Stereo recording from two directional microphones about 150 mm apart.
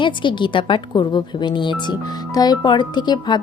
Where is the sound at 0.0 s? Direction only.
30° left (ahead or behind).